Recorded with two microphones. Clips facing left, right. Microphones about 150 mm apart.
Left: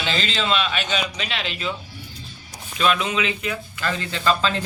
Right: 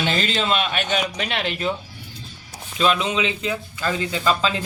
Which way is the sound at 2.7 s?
25° right (ahead or behind).